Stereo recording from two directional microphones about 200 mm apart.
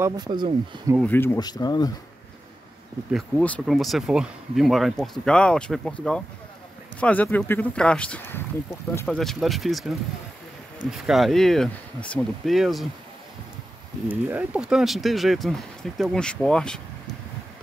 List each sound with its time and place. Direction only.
0.0 s speech: 20° right (ahead or behind)
1.0 s speech: 10° left (ahead or behind)
3.1 s speech: 5° left (ahead or behind)
14.0 s speech: 10° right (ahead or behind)